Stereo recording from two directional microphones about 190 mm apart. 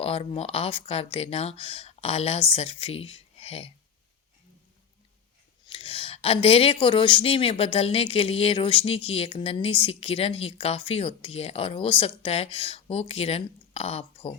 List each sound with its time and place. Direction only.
0.0 s speech: 30° left (ahead or behind)
5.6 s speech: 30° left (ahead or behind)